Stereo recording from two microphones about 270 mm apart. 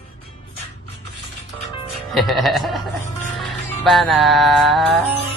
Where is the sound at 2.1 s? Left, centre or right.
Centre.